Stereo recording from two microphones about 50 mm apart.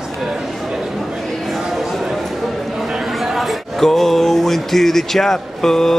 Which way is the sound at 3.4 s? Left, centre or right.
Centre.